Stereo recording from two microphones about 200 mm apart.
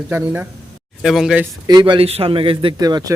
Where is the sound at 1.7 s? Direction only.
20° right (ahead or behind).